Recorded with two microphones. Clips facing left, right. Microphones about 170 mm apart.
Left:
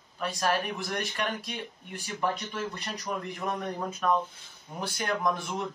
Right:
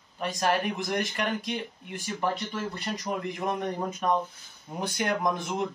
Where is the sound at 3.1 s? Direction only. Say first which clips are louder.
Right 2 dB; 15° right (ahead or behind).